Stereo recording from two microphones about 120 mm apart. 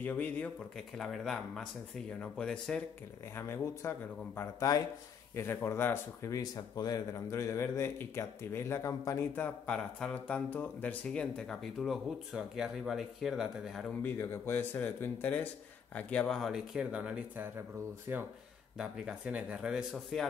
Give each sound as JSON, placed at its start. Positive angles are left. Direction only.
{"t": 0.0, "sound": "speech", "side_deg": 10}
{"t": 3.3, "sound": "speech", "side_deg": 20}
{"t": 5.3, "sound": "speech", "side_deg": 20}
{"t": 14.0, "sound": "speech", "side_deg": 20}
{"t": 18.1, "sound": "speech", "side_deg": -20}
{"t": 18.8, "sound": "speech", "side_deg": -10}